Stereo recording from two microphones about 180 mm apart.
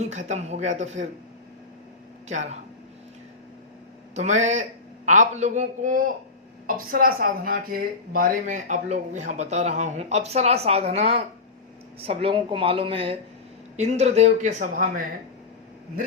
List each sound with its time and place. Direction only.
0.3 s a woman's voice: 40° right (ahead or behind)
2.3 s a woman's voice: 40° right (ahead or behind)
4.1 s a woman's voice: 40° right (ahead or behind)